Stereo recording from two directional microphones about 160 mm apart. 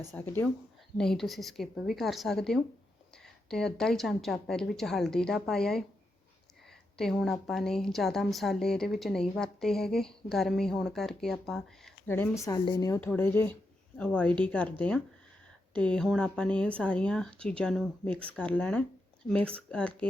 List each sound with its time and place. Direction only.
0.1 s a woman's voice: 10° left (ahead or behind)
6.9 s a woman's voice: centre (ahead or behind)
12.0 s speech: 15° left (ahead or behind)